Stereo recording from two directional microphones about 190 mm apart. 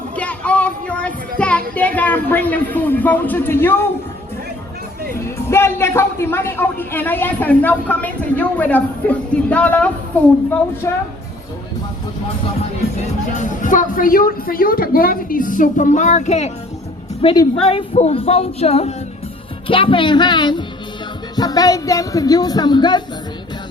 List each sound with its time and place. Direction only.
0.2 s child singing: 5° left (ahead or behind)
5.5 s a woman's voice: 15° left (ahead or behind)
13.3 s a woman's voice: 40° left (ahead or behind); by 23.0 s 25° left (ahead or behind)